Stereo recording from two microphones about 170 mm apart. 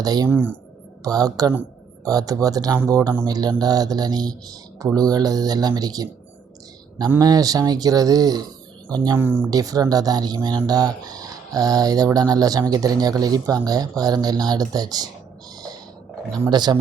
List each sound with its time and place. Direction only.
0.0 s speech: 25° right (ahead or behind)
0.3 s speech: 10° right (ahead or behind)
1.0 s speech: 20° right (ahead or behind)
7.1 s speech: 20° right (ahead or behind)
9.1 s speech: 10° right (ahead or behind)
9.5 s speech: 20° right (ahead or behind)
16.3 s speech: 25° right (ahead or behind)